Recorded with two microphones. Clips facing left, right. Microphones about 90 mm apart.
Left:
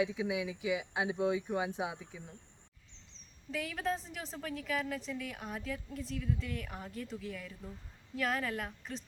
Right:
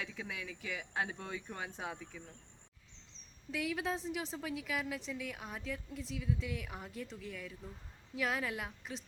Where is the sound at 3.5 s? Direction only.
Centre (ahead or behind).